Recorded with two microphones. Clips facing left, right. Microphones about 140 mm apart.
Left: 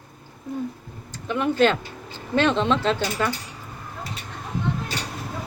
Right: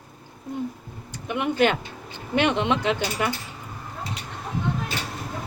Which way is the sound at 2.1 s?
15° right (ahead or behind).